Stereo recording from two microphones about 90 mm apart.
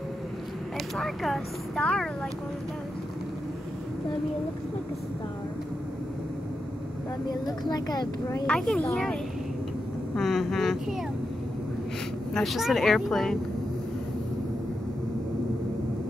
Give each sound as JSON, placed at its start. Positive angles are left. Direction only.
{"t": 0.9, "sound": "speech", "side_deg": 5}
{"t": 7.2, "sound": "speech", "side_deg": 50}
{"t": 8.5, "sound": "speech", "side_deg": 10}
{"t": 10.1, "sound": "speech", "side_deg": 5}
{"t": 12.4, "sound": "speech", "side_deg": 0}